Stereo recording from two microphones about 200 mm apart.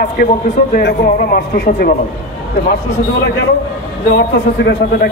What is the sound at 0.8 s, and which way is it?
Speech, 50° left (ahead or behind).